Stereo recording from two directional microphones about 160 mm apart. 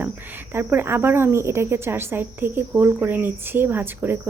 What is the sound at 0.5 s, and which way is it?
Speech, 15° right (ahead or behind).